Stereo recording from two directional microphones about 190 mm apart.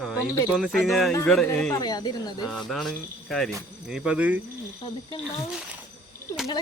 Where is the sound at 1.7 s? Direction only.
20° left (ahead or behind).